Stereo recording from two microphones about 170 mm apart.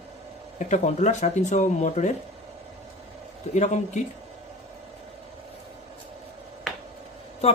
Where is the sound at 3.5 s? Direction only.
45° left (ahead or behind).